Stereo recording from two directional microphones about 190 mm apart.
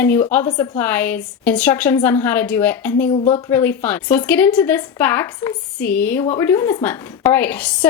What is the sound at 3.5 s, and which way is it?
Speech, 10° left (ahead or behind).